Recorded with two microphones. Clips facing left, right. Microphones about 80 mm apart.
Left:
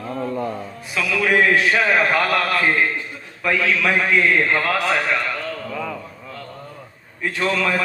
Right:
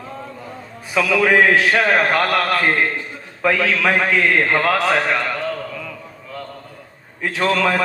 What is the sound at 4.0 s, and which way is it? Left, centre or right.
Speech, right.